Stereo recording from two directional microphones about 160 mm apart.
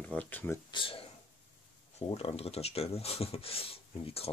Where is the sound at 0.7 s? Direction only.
35° left (ahead or behind).